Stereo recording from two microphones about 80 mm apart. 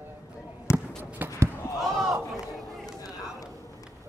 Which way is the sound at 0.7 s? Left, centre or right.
Left.